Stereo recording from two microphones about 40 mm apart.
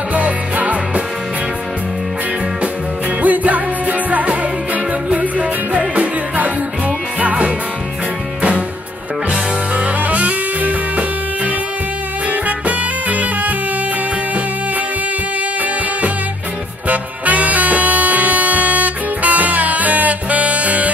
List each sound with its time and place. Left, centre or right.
0.1 s music: right
3.2 s music: right
10.0 s music: right
16.8 s music: right